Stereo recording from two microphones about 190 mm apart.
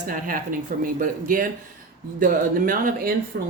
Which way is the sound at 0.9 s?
45° right (ahead or behind).